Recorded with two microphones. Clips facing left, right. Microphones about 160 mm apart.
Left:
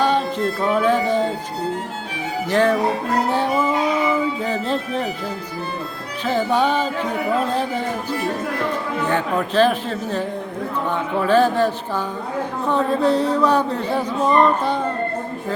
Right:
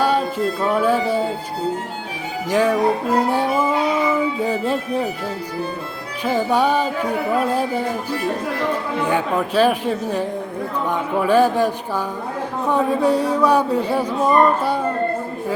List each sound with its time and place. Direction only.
0.0 s music: 10° right (ahead or behind)
2.5 s speech: 10° right (ahead or behind)
6.2 s speech: 10° right (ahead or behind)
9.0 s speech: 10° right (ahead or behind)